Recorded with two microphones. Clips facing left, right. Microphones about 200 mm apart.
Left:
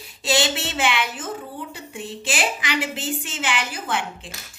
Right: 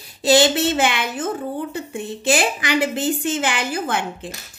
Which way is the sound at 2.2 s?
45° right (ahead or behind).